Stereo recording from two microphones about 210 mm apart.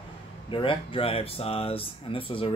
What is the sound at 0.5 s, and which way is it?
Speech, 25° left (ahead or behind).